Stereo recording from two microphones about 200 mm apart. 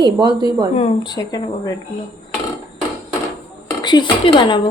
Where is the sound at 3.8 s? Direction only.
20° left (ahead or behind).